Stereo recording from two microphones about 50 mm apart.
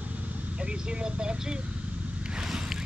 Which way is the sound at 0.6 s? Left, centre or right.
Centre.